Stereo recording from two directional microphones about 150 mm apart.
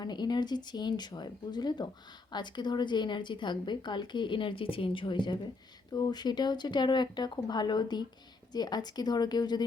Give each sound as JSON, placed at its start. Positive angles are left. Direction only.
{"t": 0.0, "sound": "speech", "side_deg": 30}